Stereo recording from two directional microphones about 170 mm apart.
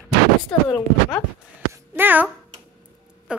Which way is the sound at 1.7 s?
10° right (ahead or behind).